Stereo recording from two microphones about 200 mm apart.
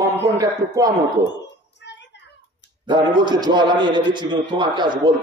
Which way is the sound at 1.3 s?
60° left (ahead or behind).